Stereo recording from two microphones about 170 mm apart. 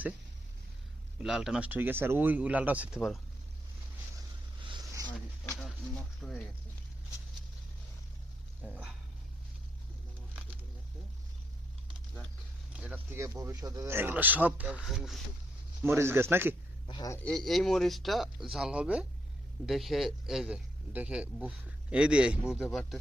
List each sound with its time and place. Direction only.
1.2 s speech: 5° right (ahead or behind)
4.6 s zipper: 25° right (ahead or behind)
6.2 s a man's voice: 5° left (ahead or behind)
8.6 s a sound: 5° right (ahead or behind)
12.7 s speech: 10° right (ahead or behind)
15.8 s speech: 15° right (ahead or behind)
16.8 s a man's voice: 25° left (ahead or behind)
17.2 s a man's voice: centre (ahead or behind)